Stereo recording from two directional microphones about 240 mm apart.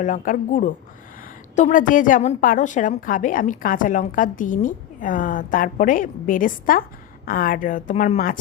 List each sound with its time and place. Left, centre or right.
0.0 s a woman's voice: left